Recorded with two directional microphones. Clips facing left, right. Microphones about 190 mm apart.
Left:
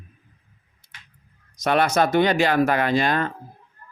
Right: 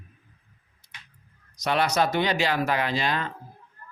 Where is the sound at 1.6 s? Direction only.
50° left (ahead or behind).